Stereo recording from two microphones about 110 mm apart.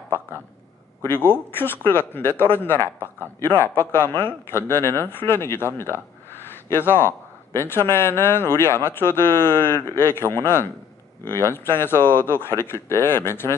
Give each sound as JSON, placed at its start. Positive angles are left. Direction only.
{"t": 1.0, "sound": "a man's voice", "side_deg": 20}